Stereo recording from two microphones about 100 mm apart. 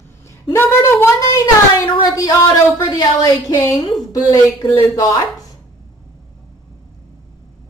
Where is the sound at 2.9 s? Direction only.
35° left (ahead or behind).